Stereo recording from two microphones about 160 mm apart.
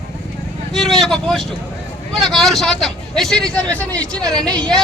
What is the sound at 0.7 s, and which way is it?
Vehicle, centre (ahead or behind).